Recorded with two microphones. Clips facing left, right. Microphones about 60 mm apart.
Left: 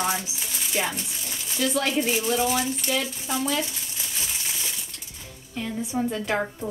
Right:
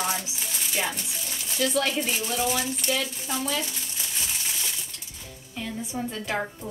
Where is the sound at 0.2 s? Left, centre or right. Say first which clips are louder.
Even; centre.